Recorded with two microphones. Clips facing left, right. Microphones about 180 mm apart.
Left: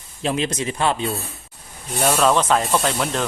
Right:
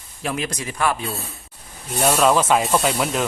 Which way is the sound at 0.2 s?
25° left (ahead or behind).